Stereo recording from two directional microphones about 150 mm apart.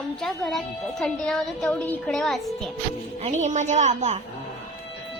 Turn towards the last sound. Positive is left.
turn(degrees=-50)  # may be behind; listen again after turning